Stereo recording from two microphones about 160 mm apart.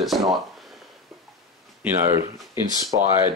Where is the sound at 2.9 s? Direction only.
30° right (ahead or behind).